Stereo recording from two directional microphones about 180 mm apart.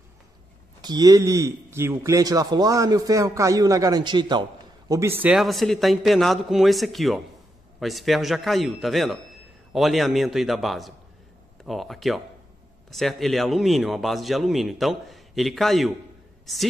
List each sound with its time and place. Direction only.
0.8 s a man's voice: 20° right (ahead or behind); by 15.9 s centre (ahead or behind)